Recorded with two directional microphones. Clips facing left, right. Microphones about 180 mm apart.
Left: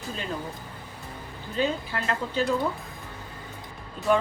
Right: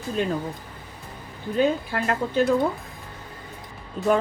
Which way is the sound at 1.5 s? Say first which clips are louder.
Right 5 dB; 55° right (ahead or behind).